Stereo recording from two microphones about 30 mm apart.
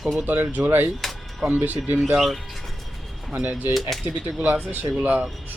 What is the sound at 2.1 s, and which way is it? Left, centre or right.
Speech, centre.